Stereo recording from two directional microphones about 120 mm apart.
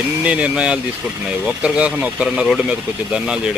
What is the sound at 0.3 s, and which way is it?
Speech, 10° right (ahead or behind).